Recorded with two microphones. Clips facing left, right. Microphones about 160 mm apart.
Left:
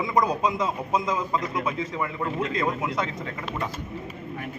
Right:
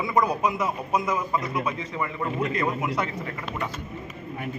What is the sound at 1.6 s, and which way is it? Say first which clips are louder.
A man's voice: left 1 dB; 10° left (ahead or behind).